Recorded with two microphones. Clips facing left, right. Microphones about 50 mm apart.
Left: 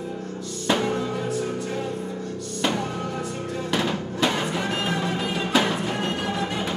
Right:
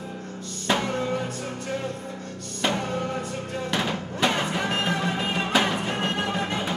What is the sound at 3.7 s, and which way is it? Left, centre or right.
Music, centre.